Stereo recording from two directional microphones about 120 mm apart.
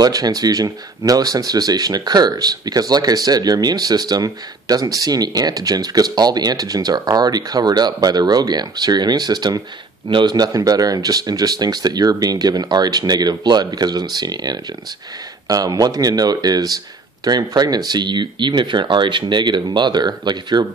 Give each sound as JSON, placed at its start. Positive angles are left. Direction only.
{"t": 0.0, "sound": "speech", "side_deg": -30}